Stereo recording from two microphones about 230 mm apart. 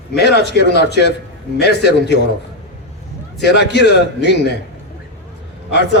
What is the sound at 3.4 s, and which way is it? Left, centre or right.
A man's voice, left.